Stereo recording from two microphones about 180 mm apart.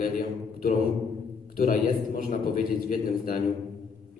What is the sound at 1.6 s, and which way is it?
A man's voice, 50° left (ahead or behind).